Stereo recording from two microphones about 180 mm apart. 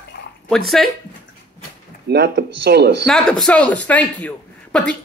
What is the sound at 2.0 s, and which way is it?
Speech, 65° right (ahead or behind).